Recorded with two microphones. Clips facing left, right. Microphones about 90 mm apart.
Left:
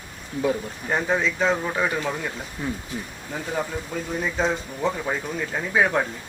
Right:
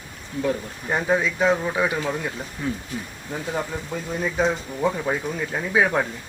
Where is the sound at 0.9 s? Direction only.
5° right (ahead or behind).